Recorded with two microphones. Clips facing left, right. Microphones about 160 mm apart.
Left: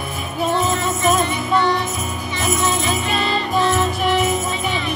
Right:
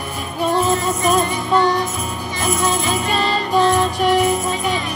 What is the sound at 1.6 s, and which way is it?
Music, 45° right (ahead or behind).